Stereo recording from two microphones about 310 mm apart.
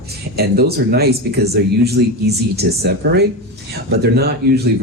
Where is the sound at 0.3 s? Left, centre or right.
Right.